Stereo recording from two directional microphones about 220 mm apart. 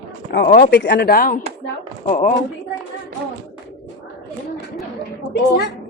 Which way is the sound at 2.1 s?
30° left (ahead or behind).